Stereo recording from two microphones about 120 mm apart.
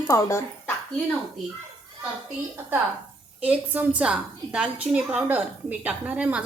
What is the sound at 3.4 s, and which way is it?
A woman's voice, 10° right (ahead or behind).